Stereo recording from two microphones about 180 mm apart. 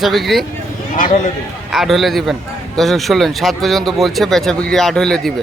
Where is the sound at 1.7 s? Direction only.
Centre (ahead or behind).